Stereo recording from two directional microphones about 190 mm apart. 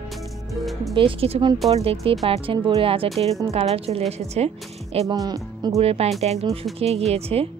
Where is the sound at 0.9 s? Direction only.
30° right (ahead or behind).